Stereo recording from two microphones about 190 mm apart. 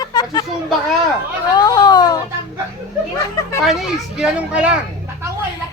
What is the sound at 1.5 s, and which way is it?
Baby cry, 20° left (ahead or behind).